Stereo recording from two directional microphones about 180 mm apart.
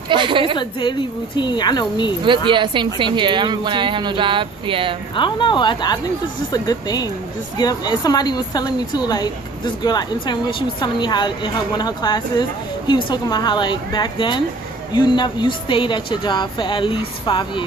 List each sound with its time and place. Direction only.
0.1 s a woman's voice: 25° right (ahead or behind)
0.6 s a woman's voice: 25° left (ahead or behind)
2.2 s a woman's voice: 25° right (ahead or behind)
5.1 s a woman's voice: 25° left (ahead or behind)